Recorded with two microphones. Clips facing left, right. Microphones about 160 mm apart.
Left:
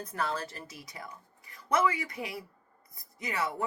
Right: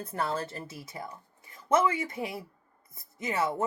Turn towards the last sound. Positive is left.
turn(degrees=-25)  # may be behind; listen again after turning